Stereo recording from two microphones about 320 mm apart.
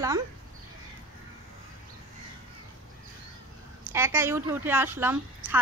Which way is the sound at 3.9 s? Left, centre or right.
Centre.